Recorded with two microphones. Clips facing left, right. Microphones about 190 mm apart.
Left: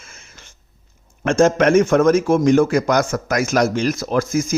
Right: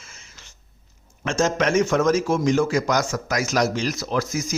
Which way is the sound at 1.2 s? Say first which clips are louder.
Left 7 dB; 55° left (ahead or behind).